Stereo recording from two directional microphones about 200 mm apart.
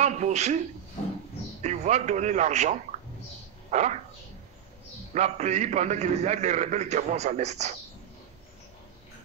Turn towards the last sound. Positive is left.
turn(degrees=-35)  # may be behind; listen again after turning